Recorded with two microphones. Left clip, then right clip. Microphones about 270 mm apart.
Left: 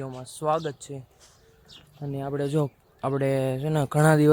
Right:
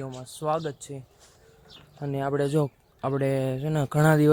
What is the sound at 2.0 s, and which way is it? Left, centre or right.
Speech, right.